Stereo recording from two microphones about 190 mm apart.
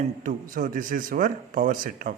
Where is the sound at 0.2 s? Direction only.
45° right (ahead or behind).